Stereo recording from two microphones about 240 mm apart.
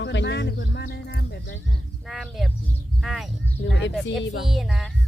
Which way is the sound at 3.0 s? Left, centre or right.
Centre.